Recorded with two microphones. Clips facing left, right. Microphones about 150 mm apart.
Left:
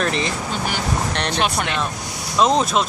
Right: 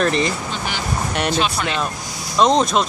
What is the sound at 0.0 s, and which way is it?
Speech, centre (ahead or behind).